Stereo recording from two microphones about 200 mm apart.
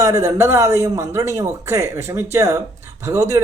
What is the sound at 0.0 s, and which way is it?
A man's voice, 15° right (ahead or behind).